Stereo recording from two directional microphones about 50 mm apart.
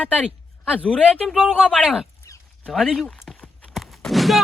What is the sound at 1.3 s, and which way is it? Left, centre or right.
Speech, centre.